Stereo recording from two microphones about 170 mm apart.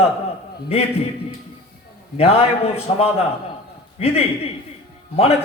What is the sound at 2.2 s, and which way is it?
Speech, 35° left (ahead or behind).